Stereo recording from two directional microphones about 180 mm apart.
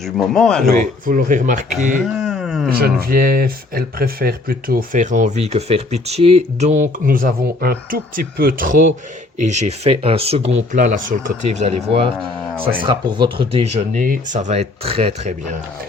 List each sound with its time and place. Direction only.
0.0 s speech: centre (ahead or behind)
1.0 s speech: 50° right (ahead or behind)
2.2 s a sound: centre (ahead or behind)
2.6 s speech: 55° right (ahead or behind); by 6.8 s 40° right (ahead or behind)
7.0 s speech: 50° right (ahead or behind)
12.8 s speech: 25° right (ahead or behind)
14.0 s speech: 45° right (ahead or behind)